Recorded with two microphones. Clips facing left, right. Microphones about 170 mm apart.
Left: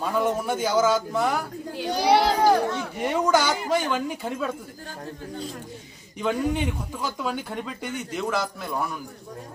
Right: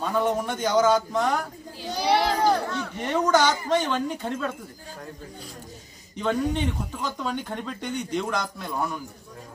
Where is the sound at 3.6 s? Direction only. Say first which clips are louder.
Even; 10° left (ahead or behind).